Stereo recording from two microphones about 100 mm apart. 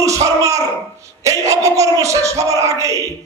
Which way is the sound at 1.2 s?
30° right (ahead or behind).